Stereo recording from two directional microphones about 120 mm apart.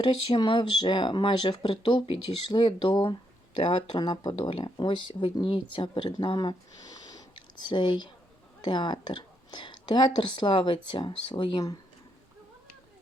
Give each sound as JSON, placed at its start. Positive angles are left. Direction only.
{"t": 0.0, "sound": "speech", "side_deg": 40}